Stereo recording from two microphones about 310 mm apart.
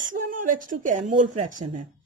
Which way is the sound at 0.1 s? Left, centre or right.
Right.